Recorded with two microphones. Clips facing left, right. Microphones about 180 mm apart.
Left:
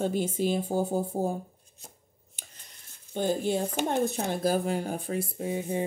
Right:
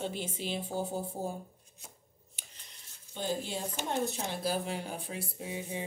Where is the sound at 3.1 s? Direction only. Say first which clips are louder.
Left 8 dB; 50° left (ahead or behind).